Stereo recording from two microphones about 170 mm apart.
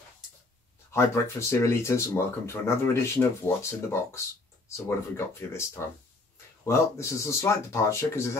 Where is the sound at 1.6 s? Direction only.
15° left (ahead or behind).